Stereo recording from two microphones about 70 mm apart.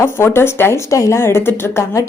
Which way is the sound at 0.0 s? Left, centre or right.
Left.